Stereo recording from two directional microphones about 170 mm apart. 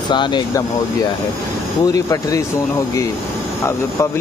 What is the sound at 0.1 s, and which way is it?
Speech, 25° left (ahead or behind).